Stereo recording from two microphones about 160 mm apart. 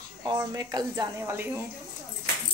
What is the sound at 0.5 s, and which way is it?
Speech, 25° right (ahead or behind).